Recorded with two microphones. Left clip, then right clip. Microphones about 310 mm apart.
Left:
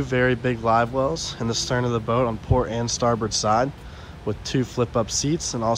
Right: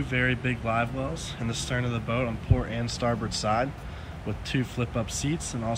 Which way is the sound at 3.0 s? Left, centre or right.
Right.